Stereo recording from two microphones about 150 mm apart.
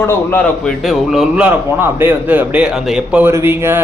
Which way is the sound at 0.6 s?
Centre (ahead or behind).